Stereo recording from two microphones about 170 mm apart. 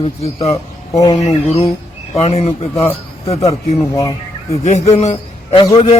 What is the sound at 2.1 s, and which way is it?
Speech, 35° left (ahead or behind).